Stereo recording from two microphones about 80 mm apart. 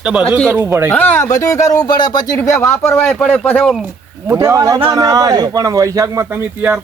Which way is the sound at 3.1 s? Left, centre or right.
Centre.